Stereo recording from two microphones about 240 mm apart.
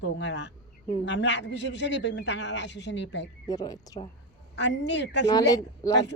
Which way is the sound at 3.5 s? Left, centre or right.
Centre.